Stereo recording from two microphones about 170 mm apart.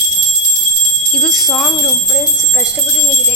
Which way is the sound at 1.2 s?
Centre (ahead or behind).